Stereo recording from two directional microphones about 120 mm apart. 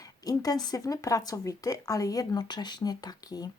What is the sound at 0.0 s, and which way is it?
Speech, 30° left (ahead or behind).